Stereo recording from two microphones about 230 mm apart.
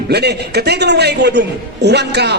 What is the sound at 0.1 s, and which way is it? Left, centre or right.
A woman's voice, right.